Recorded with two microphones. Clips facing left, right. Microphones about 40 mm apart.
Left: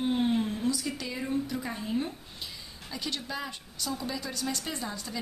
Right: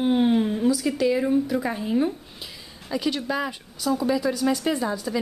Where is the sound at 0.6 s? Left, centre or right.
Centre.